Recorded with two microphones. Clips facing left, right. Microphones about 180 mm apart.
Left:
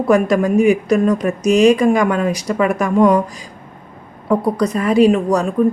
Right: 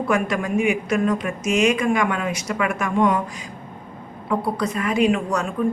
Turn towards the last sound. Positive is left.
turn(degrees=35)  # may be behind; listen again after turning